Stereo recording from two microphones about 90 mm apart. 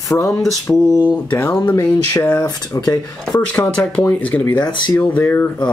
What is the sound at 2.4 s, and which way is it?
Speech, 45° left (ahead or behind).